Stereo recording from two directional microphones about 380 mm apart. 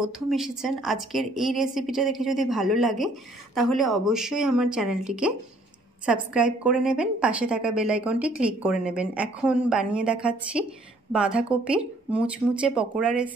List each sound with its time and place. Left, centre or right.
0.0 s a woman's voice: centre